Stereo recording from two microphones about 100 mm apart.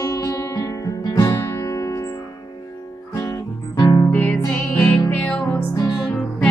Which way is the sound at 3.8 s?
40° left (ahead or behind).